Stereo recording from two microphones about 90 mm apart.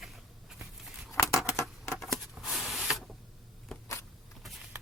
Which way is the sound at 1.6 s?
35° left (ahead or behind).